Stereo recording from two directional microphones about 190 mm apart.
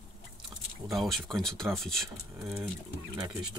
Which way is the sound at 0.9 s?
Centre (ahead or behind).